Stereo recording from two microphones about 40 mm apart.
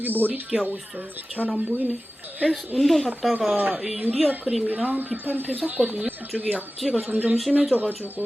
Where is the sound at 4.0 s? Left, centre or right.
Right.